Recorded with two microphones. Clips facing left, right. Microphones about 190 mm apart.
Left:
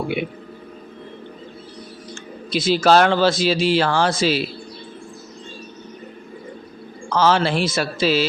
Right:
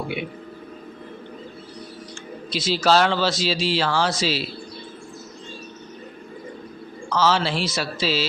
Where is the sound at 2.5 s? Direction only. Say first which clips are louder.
Left 4 dB; 55° left (ahead or behind).